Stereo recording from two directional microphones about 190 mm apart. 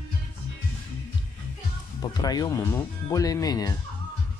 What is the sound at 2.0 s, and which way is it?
Speech, 20° left (ahead or behind).